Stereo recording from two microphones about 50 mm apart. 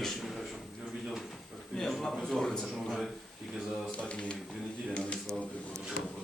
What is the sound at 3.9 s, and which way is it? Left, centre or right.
Speech, left.